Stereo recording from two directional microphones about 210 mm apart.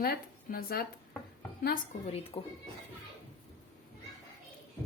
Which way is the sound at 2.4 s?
25° left (ahead or behind).